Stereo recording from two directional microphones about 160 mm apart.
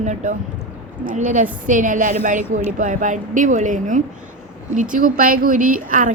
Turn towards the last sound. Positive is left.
turn(degrees=-55)  # may be behind; listen again after turning